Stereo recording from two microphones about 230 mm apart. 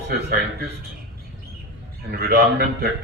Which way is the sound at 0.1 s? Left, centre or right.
Right.